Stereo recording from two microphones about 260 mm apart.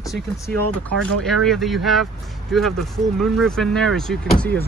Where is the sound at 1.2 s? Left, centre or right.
Centre.